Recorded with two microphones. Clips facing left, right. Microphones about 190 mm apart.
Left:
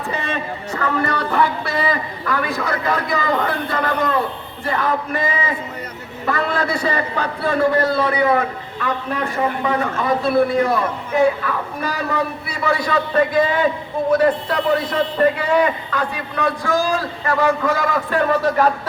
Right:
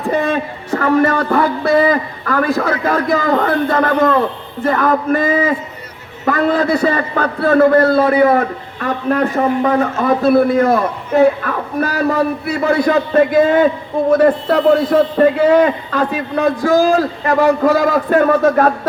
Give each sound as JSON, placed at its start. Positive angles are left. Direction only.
{"t": 0.1, "sound": "a man's voice", "side_deg": -45}